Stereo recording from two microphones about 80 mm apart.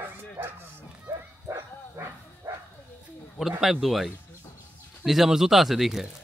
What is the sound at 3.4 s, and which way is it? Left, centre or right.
Speech, centre.